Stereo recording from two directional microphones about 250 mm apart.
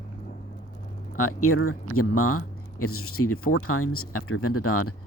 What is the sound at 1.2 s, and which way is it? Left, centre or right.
Speech, left.